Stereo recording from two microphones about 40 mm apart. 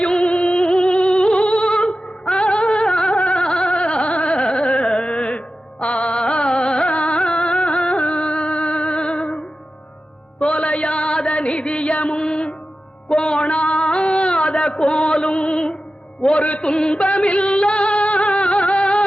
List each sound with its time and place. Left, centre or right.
0.0 s music: left
3.2 s gargling: left
3.4 s a sound: left
5.8 s carnatic music: left
10.4 s chant: left
12.2 s music: left
13.1 s a sound: left
16.6 s music: left